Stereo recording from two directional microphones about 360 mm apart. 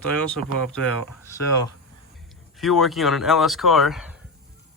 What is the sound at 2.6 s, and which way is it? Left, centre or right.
Speech, centre.